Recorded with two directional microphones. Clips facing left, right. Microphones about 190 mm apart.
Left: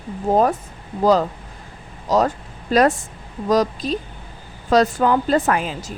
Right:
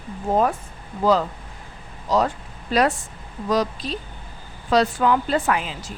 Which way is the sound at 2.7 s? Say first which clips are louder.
Left 4 dB; 45° left (ahead or behind).